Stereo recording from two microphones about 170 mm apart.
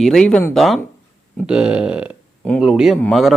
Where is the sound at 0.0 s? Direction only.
5° left (ahead or behind).